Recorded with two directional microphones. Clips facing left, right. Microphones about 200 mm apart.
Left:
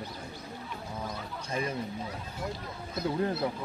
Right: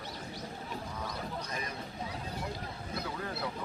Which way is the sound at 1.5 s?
25° left (ahead or behind).